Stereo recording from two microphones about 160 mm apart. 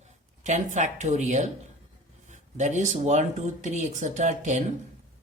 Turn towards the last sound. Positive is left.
turn(degrees=-45)  # may be behind; listen again after turning